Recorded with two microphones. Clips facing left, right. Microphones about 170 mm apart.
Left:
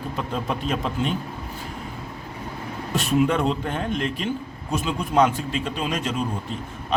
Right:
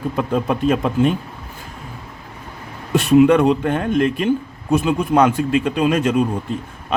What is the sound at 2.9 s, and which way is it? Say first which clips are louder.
A man's voice: right 9 dB; 70° right (ahead or behind).